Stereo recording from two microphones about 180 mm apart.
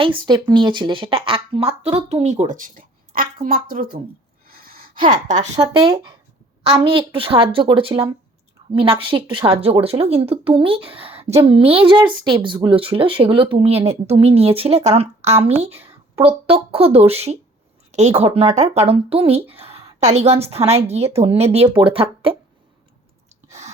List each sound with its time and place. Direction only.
0.0 s speech: 25° right (ahead or behind); by 4.0 s 55° right (ahead or behind)
4.4 s gasp: 55° right (ahead or behind)
5.5 s a woman's voice: 25° right (ahead or behind)